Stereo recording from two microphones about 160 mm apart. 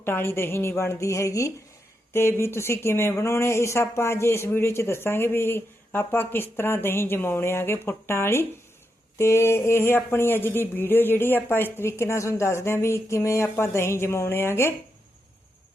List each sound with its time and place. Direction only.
0.0 s speech: 15° left (ahead or behind)